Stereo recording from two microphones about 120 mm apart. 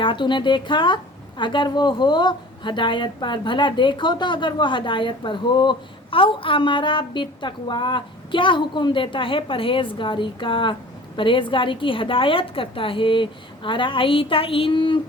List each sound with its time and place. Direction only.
0.0 s a woman's voice: 45° left (ahead or behind)